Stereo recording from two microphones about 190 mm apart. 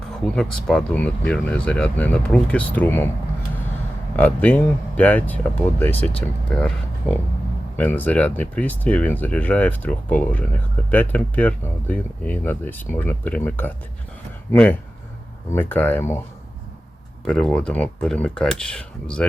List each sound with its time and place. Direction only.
0.3 s speech: 5° left (ahead or behind)
4.2 s speech: 10° left (ahead or behind)
17.2 s speech: 5° left (ahead or behind)